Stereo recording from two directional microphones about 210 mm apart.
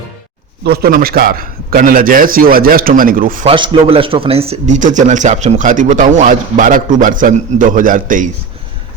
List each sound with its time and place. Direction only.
0.6 s a man's voice: 45° right (ahead or behind)
3.4 s speech: 25° right (ahead or behind)